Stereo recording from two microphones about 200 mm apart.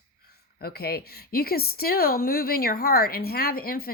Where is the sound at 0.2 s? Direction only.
50° left (ahead or behind).